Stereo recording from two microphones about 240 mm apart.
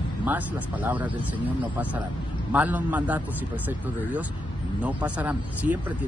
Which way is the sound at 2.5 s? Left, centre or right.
Centre.